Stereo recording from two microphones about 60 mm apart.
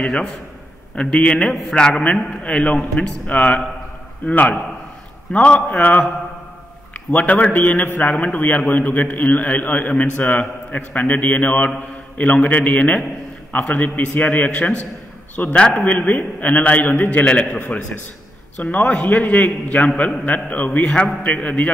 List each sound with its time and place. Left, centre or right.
0.0 s a man's voice: centre
7.1 s a man's voice: left
17.2 s a man's voice: centre
17.5 s a man's voice: left